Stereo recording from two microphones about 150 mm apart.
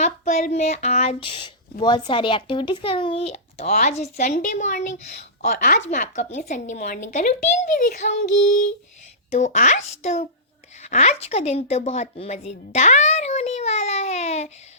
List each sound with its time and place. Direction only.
0.0 s speech: 50° left (ahead or behind)
9.3 s speech: 55° left (ahead or behind)
10.8 s a sound: 50° left (ahead or behind)